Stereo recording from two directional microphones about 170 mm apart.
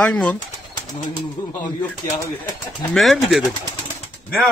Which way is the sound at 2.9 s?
Centre (ahead or behind).